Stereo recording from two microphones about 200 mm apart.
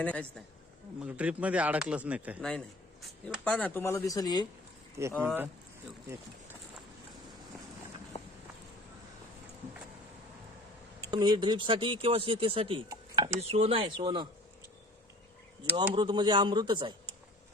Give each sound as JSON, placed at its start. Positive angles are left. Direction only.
{"t": 0.0, "sound": "speech", "side_deg": 5}
{"t": 1.0, "sound": "speech", "side_deg": -5}
{"t": 3.2, "sound": "speech", "side_deg": 5}
{"t": 5.2, "sound": "speech", "side_deg": -10}
{"t": 11.0, "sound": "speech", "side_deg": -20}
{"t": 13.4, "sound": "speech", "side_deg": -30}
{"t": 16.0, "sound": "speech", "side_deg": -20}